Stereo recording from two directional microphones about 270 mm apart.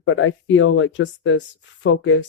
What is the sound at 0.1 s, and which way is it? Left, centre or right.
Speech, left.